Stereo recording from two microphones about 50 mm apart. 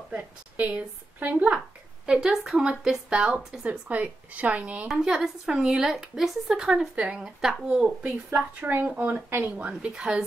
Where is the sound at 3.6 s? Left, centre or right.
Right.